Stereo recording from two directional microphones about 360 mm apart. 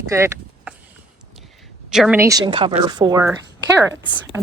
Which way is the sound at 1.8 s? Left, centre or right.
Centre.